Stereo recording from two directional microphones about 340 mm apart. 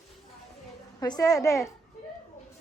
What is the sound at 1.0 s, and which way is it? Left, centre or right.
Speech, centre.